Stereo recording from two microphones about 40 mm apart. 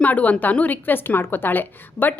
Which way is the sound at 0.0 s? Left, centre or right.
Left.